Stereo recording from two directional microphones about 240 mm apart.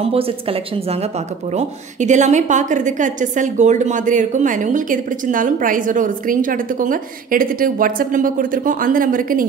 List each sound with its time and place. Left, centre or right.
0.0 s a woman's voice: right